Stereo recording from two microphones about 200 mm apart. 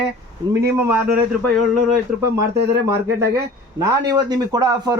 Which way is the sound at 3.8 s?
20° right (ahead or behind).